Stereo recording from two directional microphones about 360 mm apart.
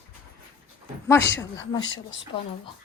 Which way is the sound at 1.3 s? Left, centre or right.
Centre.